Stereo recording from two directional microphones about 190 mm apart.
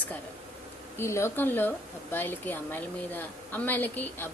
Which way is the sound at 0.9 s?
15° left (ahead or behind).